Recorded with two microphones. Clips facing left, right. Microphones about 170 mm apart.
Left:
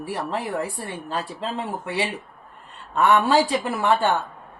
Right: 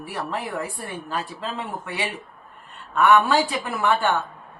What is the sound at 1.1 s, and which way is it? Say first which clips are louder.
A man's voice: left 2 dB; 30° left (ahead or behind).